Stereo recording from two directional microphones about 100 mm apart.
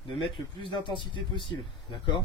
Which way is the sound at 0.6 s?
55° left (ahead or behind).